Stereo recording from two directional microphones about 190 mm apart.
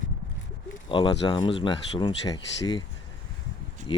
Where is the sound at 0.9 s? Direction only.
25° left (ahead or behind).